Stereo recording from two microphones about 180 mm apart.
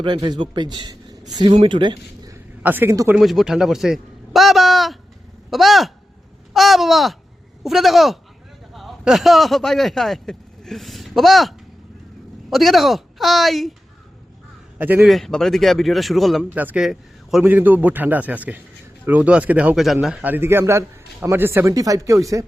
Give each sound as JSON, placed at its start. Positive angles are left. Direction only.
{"t": 0.0, "sound": "a man's voice", "side_deg": -25}
{"t": 2.6, "sound": "a man's voice", "side_deg": -10}
{"t": 3.2, "sound": "a man's voice", "side_deg": 0}
{"t": 14.8, "sound": "a man's voice", "side_deg": -10}